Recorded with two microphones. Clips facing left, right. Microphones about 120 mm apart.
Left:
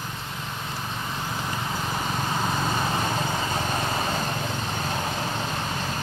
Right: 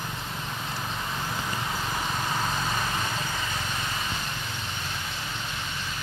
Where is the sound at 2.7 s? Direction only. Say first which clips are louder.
Left 4 dB; 35° left (ahead or behind).